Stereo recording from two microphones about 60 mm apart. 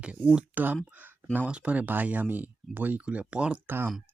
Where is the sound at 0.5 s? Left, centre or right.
Right.